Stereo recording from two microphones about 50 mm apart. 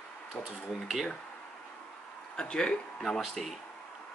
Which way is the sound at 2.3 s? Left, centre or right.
Centre.